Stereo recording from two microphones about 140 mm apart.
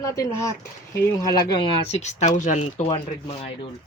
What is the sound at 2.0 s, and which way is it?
Speech, 55° left (ahead or behind).